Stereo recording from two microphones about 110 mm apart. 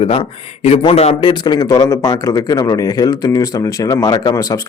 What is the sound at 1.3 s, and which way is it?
Speech, 40° left (ahead or behind).